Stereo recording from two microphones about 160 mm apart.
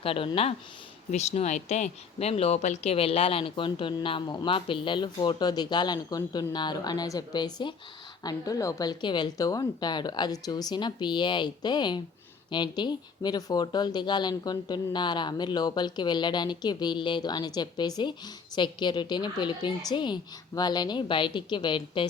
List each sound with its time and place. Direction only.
0.0 s speech: 35° left (ahead or behind)